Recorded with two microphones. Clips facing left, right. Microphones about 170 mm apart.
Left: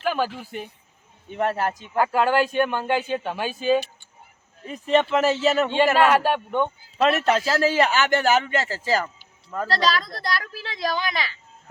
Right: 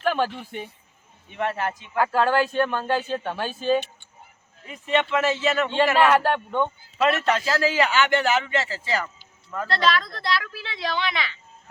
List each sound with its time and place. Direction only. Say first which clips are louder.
0.0 s a sound: right 1 dB; 5° left (ahead or behind)
0.3 s speech: even; 5° left (ahead or behind)
1.3 s speech: left 3 dB; 40° left (ahead or behind)
2.0 s speech: left 1 dB; 10° left (ahead or behind)
4.6 s speech: left 4 dB; 35° left (ahead or behind)
6.1 s speech: even; 10° left (ahead or behind)
7.3 s speech: left 2 dB; 35° left (ahead or behind)